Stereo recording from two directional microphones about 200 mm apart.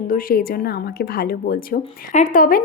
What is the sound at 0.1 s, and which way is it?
Speech, 45° left (ahead or behind).